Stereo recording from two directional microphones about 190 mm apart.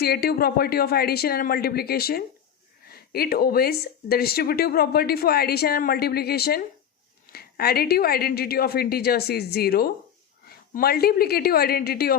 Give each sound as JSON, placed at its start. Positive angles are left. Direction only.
{"t": 0.0, "sound": "a woman's voice", "side_deg": 55}